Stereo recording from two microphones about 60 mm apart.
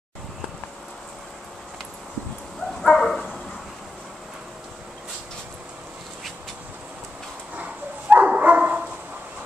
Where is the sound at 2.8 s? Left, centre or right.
Centre.